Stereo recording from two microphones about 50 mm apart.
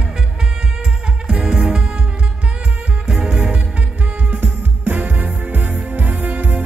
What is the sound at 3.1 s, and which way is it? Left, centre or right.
Music, centre.